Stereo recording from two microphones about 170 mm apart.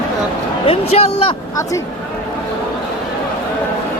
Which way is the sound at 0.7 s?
35° left (ahead or behind).